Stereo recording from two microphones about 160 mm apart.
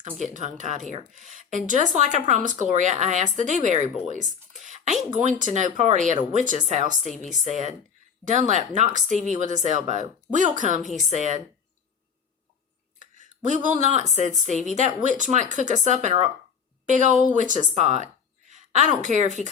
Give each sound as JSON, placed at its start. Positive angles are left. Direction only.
{"t": 0.0, "sound": "speech", "side_deg": -50}
{"t": 8.2, "sound": "speech", "side_deg": -50}
{"t": 13.0, "sound": "a woman's voice", "side_deg": -50}